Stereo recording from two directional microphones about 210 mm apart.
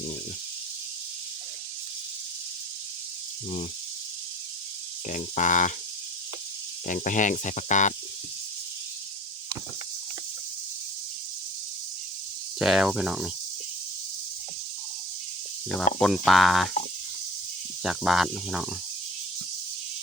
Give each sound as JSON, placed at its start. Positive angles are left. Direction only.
{"t": 5.0, "sound": "speech", "side_deg": 35}
{"t": 6.8, "sound": "speech", "side_deg": 40}
{"t": 12.5, "sound": "speech", "side_deg": 0}
{"t": 16.0, "sound": "speech", "side_deg": 0}
{"t": 17.8, "sound": "speech", "side_deg": 0}